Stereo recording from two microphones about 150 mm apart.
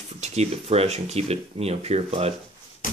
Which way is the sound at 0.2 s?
45° right (ahead or behind).